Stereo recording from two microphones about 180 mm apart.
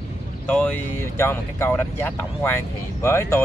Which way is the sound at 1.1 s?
15° left (ahead or behind).